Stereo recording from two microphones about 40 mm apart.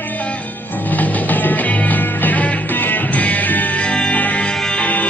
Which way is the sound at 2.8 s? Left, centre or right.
Left.